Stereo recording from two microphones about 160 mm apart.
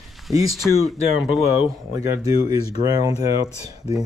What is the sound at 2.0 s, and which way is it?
Speech, 20° right (ahead or behind).